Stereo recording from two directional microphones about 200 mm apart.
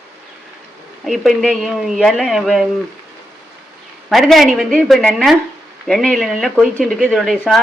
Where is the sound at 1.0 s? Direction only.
Centre (ahead or behind).